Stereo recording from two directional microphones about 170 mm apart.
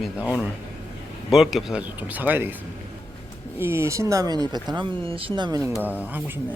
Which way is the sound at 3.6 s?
15° right (ahead or behind).